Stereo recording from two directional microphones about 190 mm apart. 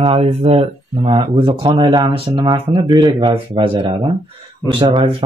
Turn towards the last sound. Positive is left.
turn(degrees=-25)  # may be behind; listen again after turning